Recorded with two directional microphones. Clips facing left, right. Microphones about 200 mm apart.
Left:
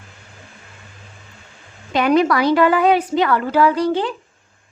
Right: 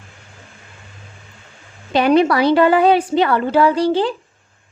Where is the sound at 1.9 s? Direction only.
30° right (ahead or behind).